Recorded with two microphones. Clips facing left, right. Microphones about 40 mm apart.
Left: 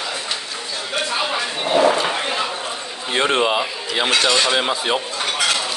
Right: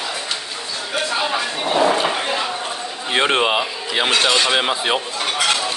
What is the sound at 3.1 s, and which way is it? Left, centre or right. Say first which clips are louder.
Speech: right 1 dB; right.